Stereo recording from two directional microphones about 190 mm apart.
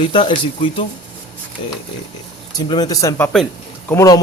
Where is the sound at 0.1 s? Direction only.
25° left (ahead or behind).